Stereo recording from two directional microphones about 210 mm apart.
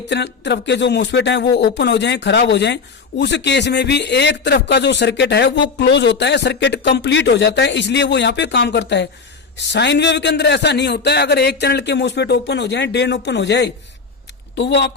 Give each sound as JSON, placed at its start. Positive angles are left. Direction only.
{"t": 0.1, "sound": "speech", "side_deg": 55}